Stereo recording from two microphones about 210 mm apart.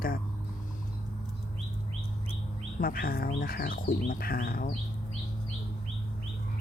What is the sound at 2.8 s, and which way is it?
Speech, 45° left (ahead or behind).